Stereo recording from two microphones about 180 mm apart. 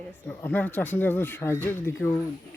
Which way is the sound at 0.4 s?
10° left (ahead or behind).